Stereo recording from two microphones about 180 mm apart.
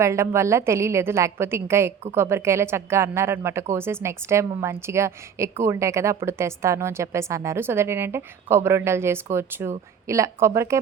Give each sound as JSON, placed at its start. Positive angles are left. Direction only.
{"t": 0.0, "sound": "a woman's voice", "side_deg": -15}